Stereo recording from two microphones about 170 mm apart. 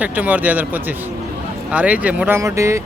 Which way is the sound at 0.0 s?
10° right (ahead or behind).